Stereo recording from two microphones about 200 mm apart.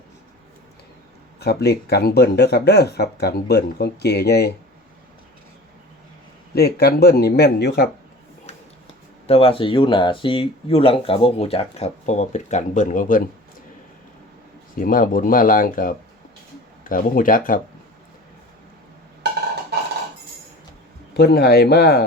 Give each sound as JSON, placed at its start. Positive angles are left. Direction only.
{"t": 1.4, "sound": "speech", "side_deg": 55}
{"t": 6.5, "sound": "speech", "side_deg": 50}
{"t": 8.5, "sound": "a sound", "side_deg": 30}
{"t": 9.2, "sound": "speech", "side_deg": 30}
{"t": 14.8, "sound": "speech", "side_deg": 45}
{"t": 21.1, "sound": "speech", "side_deg": 55}